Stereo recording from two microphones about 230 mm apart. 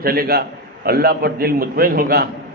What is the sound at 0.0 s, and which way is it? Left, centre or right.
A man's voice, right.